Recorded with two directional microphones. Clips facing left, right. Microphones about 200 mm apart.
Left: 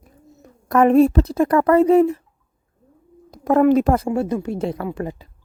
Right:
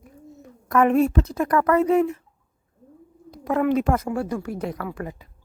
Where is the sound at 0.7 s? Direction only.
35° left (ahead or behind).